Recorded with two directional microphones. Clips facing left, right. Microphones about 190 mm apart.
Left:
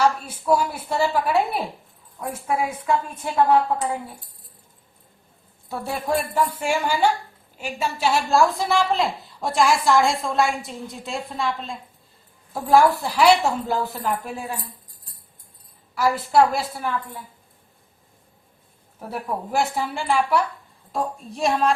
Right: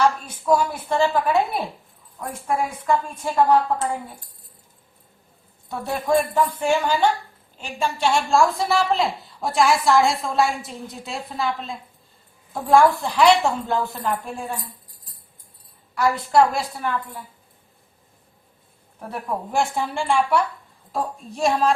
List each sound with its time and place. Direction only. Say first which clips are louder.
0.3 s a woman's voice: right 1 dB; 10° left (ahead or behind)
5.6 s a woman's voice: right 2 dB; 5° left (ahead or behind)
16.0 s a woman's voice: even; centre (ahead or behind)
18.9 s a woman's voice: even; 5° left (ahead or behind)